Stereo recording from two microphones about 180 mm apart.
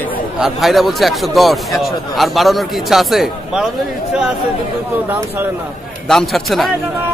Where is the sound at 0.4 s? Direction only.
Centre (ahead or behind).